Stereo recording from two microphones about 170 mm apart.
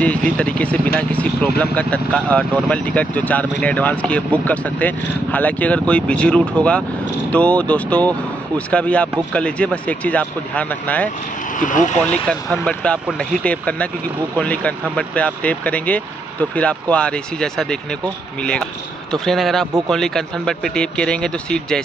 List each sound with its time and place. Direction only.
0.0 s speech: 5° left (ahead or behind)
11.5 s speech: 50° left (ahead or behind)
12.0 s speech: 5° left (ahead or behind)
19.1 s speech: centre (ahead or behind)